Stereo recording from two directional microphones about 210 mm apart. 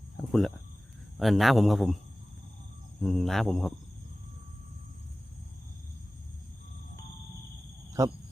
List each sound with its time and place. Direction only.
0.3 s a man's voice: centre (ahead or behind)
3.0 s a man's voice: centre (ahead or behind)
8.0 s speech: 15° right (ahead or behind)